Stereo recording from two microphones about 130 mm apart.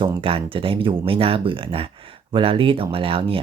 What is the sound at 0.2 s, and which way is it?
Speech, 45° right (ahead or behind).